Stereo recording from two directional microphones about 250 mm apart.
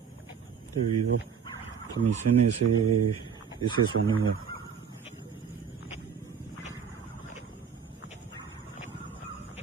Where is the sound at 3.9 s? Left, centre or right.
Right.